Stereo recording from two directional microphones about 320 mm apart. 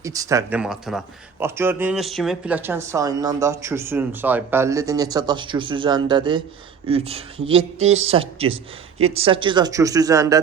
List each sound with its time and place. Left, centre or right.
0.0 s speech: centre